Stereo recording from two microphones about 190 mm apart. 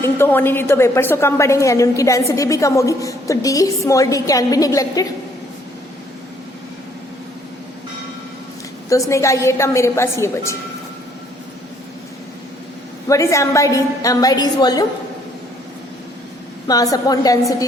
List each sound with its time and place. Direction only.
0.0 s a woman's voice: 10° left (ahead or behind)
8.9 s a woman's voice: 15° left (ahead or behind)
13.1 s a woman's voice: 15° left (ahead or behind)
16.6 s a woman's voice: 20° left (ahead or behind)